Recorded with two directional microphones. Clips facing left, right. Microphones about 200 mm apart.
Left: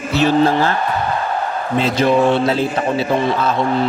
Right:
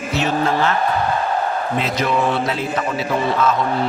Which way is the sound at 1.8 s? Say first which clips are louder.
Left 7 dB; 30° left (ahead or behind).